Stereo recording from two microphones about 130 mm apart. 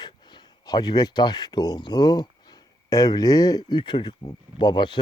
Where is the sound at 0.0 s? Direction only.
35° left (ahead or behind).